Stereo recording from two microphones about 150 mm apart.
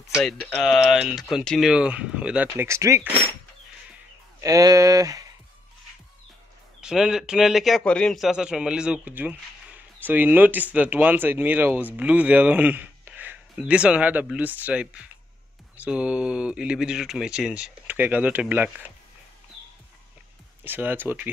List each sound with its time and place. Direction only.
0.1 s a man's voice: centre (ahead or behind); by 3.1 s 20° right (ahead or behind)
4.4 s speech: 25° right (ahead or behind)
6.8 s a man's voice: 5° right (ahead or behind)
20.6 s a man's voice: 15° right (ahead or behind)